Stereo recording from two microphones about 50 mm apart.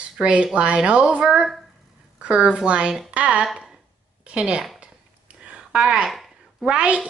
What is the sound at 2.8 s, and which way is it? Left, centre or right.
Speech, centre.